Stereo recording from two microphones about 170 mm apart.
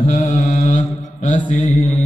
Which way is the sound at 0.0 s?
45° left (ahead or behind).